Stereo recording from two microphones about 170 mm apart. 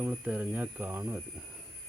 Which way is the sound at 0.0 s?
10° right (ahead or behind).